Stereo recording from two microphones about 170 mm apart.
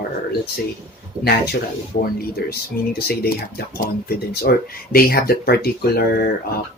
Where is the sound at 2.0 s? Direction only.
60° left (ahead or behind).